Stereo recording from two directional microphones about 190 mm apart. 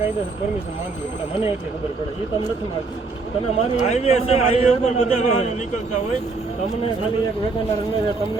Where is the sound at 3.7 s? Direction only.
35° left (ahead or behind).